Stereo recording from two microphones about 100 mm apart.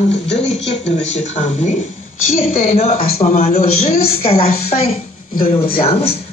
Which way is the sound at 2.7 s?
90° left.